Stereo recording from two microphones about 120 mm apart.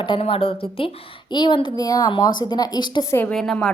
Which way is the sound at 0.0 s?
45° left (ahead or behind).